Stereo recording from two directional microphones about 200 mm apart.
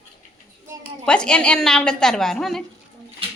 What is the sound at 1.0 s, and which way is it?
A woman's voice, 5° left (ahead or behind).